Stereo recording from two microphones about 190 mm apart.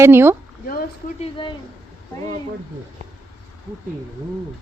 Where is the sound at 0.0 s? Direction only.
10° right (ahead or behind).